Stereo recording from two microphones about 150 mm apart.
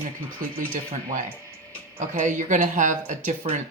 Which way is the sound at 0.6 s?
65° right (ahead or behind).